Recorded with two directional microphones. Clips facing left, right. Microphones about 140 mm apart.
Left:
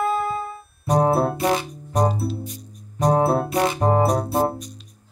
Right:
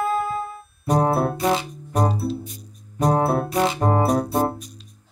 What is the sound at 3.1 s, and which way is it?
Music, 25° left (ahead or behind).